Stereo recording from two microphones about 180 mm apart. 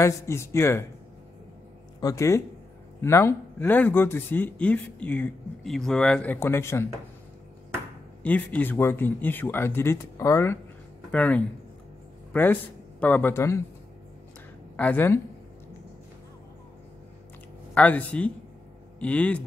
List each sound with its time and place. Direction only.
0.0 s speech: 15° left (ahead or behind)
2.0 s speech: 20° left (ahead or behind)
8.2 s a man's voice: 10° left (ahead or behind)
14.8 s speech: 10° left (ahead or behind)
17.7 s speech: 10° left (ahead or behind)